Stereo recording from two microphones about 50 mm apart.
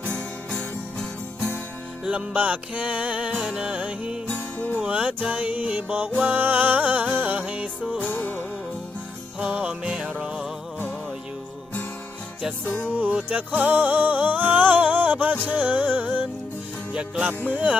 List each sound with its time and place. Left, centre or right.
0.0 s music: left
2.0 s music: right; by 3.7 s centre
3.7 s music: right
4.3 s music: left
4.8 s music: right
8.0 s music: left
9.5 s music: right
12.6 s music: left
12.9 s music: right
16.9 s music: right
17.4 s music: right